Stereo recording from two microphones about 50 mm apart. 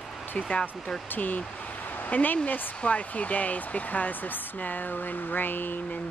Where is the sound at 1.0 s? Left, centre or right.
Left.